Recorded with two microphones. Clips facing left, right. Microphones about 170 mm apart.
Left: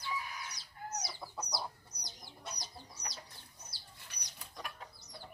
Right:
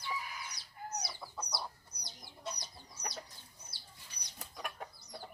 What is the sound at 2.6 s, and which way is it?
Chicken, 55° right (ahead or behind).